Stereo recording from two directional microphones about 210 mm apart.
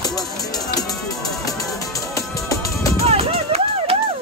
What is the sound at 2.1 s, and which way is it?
Music, 15° left (ahead or behind).